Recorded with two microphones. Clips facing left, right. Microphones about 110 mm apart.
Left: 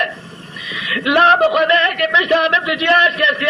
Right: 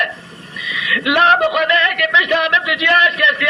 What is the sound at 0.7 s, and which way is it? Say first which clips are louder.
A man's voice: left 1 dB; 35° left (ahead or behind).